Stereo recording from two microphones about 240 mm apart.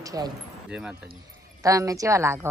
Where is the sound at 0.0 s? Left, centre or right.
Centre.